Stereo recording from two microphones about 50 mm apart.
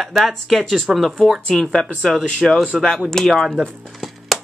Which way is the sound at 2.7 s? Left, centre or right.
Centre.